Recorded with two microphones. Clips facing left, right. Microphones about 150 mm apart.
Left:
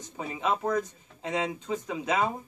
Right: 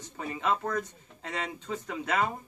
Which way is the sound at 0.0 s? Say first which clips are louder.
Left 1 dB; 15° left (ahead or behind).